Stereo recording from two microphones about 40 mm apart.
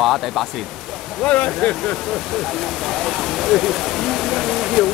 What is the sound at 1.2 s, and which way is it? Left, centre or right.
Speech, left.